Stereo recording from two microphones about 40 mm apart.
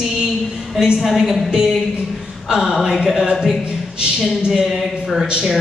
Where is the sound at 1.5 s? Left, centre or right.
Centre.